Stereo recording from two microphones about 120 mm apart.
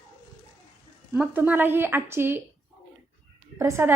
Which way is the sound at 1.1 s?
15° right (ahead or behind).